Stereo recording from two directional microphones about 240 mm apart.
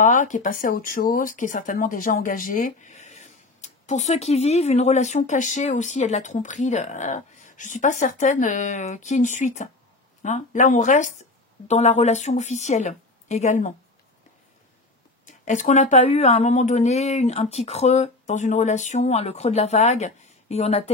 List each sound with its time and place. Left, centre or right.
0.0 s speech: left
15.2 s speech: left